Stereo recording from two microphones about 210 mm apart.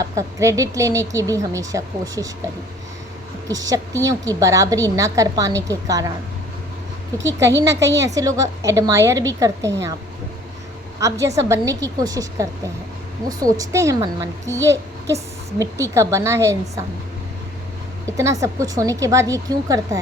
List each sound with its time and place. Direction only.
0.0 s speech: 15° right (ahead or behind)
3.5 s speech: 15° right (ahead or behind)
7.6 s speech: 15° right (ahead or behind)
11.0 s speech: 15° right (ahead or behind)
18.2 s speech: 15° right (ahead or behind)